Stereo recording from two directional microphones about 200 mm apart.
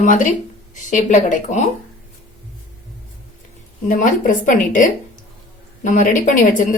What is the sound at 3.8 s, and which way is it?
A woman's voice, 40° left (ahead or behind).